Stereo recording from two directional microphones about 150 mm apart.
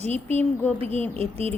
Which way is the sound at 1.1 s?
40° right (ahead or behind).